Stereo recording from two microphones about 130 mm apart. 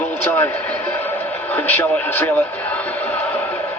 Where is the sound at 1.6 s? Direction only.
15° left (ahead or behind).